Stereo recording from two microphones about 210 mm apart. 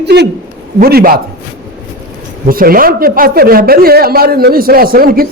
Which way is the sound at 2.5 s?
45° right (ahead or behind).